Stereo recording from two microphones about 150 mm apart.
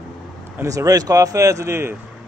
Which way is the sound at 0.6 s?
20° right (ahead or behind).